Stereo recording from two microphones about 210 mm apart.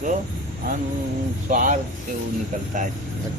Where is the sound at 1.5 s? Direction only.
35° right (ahead or behind).